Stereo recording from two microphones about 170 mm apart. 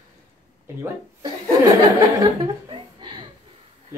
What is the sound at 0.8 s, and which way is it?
Speech, 20° right (ahead or behind).